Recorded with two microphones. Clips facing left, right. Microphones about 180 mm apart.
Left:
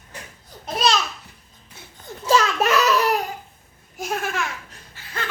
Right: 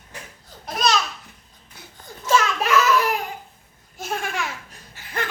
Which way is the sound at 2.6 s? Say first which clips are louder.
Even; 40° left (ahead or behind).